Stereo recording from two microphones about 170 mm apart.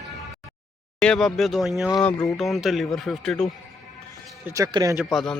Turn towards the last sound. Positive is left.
turn(degrees=0)  # may be behind; listen again after turning